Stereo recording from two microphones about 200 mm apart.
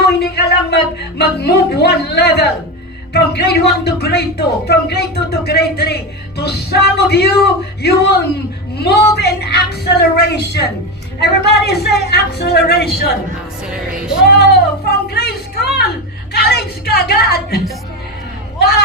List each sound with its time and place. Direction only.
0.0 s a sound: 55° left (ahead or behind)
1.2 s a man's voice: 55° left (ahead or behind)
13.7 s music: 5° right (ahead or behind)
14.3 s speech: 55° left (ahead or behind)